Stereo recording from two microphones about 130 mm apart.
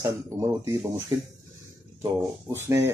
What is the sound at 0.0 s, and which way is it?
Speech, 25° right (ahead or behind).